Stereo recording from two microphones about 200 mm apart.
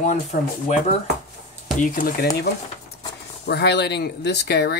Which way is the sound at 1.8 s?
45° left (ahead or behind).